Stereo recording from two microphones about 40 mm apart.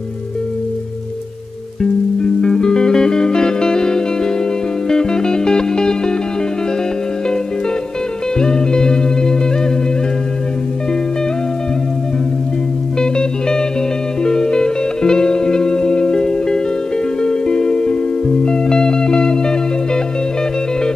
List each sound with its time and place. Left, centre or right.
2.2 s music: centre
8.4 s music: centre
13.0 s music: centre